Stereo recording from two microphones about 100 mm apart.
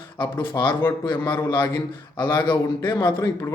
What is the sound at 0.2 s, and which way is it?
Speech, 30° left (ahead or behind).